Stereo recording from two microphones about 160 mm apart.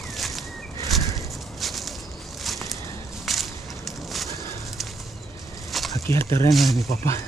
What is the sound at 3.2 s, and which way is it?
Whip, centre (ahead or behind).